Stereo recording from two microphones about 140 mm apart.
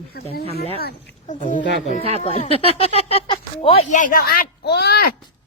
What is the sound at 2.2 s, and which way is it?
Speech, 50° left (ahead or behind).